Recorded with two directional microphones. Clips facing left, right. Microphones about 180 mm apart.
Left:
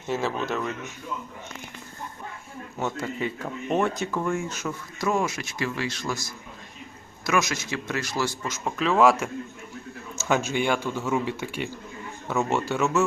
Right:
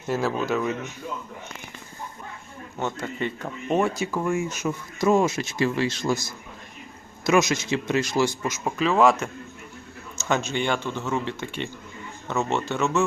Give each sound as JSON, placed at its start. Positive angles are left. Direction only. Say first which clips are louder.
{"t": 0.1, "sound": "speech", "louder": "right 3 dB", "side_deg": -5}
{"t": 2.7, "sound": "speech", "louder": "even", "side_deg": 5}
{"t": 7.3, "sound": "speech", "louder": "right 5 dB", "side_deg": -20}
{"t": 8.8, "sound": "speech", "louder": "even", "side_deg": 0}